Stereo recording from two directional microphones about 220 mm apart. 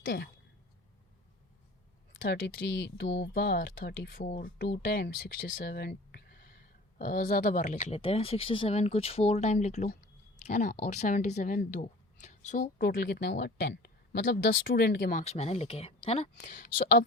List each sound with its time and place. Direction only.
0.0 s speech: 45° left (ahead or behind)
2.2 s speech: 55° left (ahead or behind)
5.5 s a sound: 45° left (ahead or behind)
7.0 s speech: 35° left (ahead or behind)
12.8 s speech: 45° left (ahead or behind)
15.1 s speech: 30° left (ahead or behind)
16.4 s speech: 40° left (ahead or behind)